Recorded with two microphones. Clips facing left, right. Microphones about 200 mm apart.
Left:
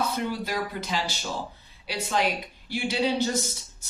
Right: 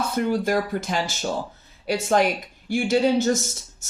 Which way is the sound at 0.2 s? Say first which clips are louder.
Right 7 dB; 50° right (ahead or behind).